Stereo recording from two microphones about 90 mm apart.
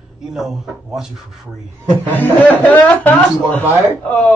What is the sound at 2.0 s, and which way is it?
A man's voice, 20° left (ahead or behind).